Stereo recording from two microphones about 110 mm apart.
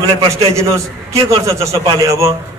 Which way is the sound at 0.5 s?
25° right (ahead or behind).